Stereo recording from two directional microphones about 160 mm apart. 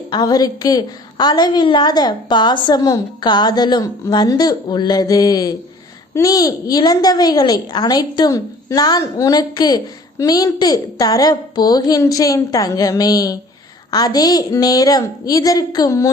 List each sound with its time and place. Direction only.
0.1 s a woman's voice: 25° left (ahead or behind)